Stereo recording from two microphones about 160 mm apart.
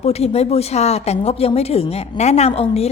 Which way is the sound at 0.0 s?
40° left (ahead or behind).